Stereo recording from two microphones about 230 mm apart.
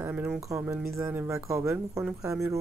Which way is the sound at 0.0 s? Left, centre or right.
Centre.